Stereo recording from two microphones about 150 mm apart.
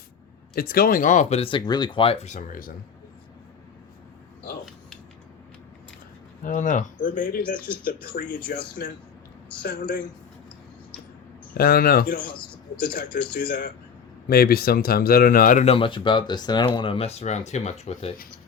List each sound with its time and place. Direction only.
0.5 s speech: 90° left; by 2.1 s 35° left (ahead or behind)
2.2 s speech: 60° left (ahead or behind)
6.4 s speech: 60° left (ahead or behind)
8.8 s a man's voice: 90° left
9.6 s speech: 75° left (ahead or behind)
11.5 s speech: 85° left
14.3 s speech: 90° left; by 15.6 s 70° left (ahead or behind)
15.6 s speech: 35° left (ahead or behind)